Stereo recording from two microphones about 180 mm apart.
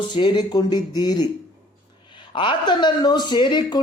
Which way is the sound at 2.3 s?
25° left (ahead or behind).